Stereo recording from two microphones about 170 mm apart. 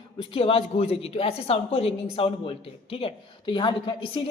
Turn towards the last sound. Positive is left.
turn(degrees=25)  # may be behind; listen again after turning